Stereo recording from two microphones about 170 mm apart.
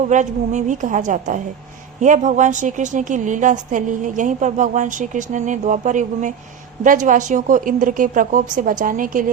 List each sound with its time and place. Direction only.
0.1 s a woman's voice: 45° right (ahead or behind)